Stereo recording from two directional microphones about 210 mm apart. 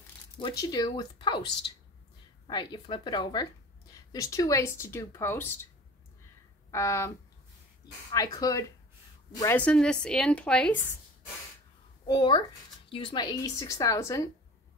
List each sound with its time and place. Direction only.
0.4 s speech: 20° left (ahead or behind)
2.4 s speech: 20° left (ahead or behind)
6.7 s speech: 15° left (ahead or behind)
8.1 s a woman's voice: 15° left (ahead or behind)
12.1 s speech: 20° left (ahead or behind)